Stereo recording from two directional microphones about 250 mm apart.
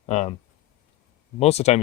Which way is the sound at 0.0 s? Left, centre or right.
Left.